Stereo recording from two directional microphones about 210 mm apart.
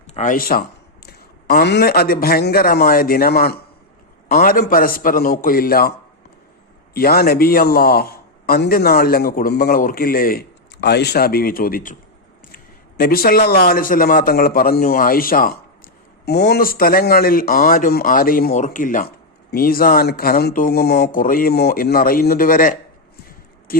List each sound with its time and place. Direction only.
0.1 s a man's voice: 40° left (ahead or behind)
6.9 s a man's voice: 45° left (ahead or behind)
13.0 s a man's voice: 45° left (ahead or behind)